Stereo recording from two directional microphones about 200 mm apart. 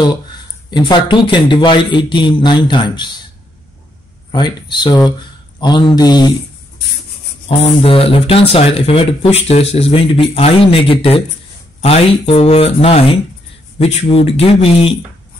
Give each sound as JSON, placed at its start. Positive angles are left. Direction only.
{"t": 0.0, "sound": "speech", "side_deg": 20}
{"t": 4.3, "sound": "speech", "side_deg": 20}
{"t": 7.4, "sound": "speech", "side_deg": 30}